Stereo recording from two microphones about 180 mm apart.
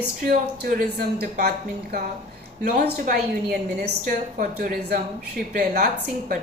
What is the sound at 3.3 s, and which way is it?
A woman's voice, 55° right (ahead or behind).